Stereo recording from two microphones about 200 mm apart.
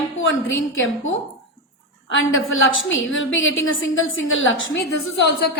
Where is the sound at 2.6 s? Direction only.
75° left (ahead or behind).